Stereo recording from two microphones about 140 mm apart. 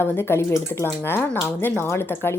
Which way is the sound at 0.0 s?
15° left (ahead or behind).